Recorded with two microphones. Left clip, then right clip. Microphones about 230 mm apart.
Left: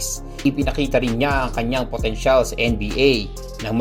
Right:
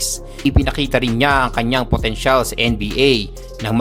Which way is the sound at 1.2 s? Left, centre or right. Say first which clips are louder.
Right 5 dB; right.